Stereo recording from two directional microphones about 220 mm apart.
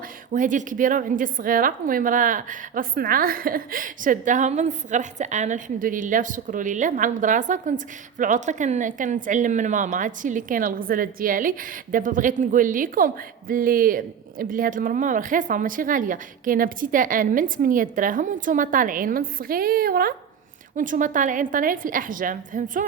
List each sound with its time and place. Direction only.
0.3 s a woman's voice: 35° right (ahead or behind)